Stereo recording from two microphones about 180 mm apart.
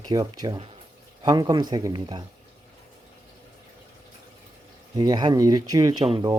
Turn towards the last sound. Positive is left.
turn(degrees=-25)  # may be behind; listen again after turning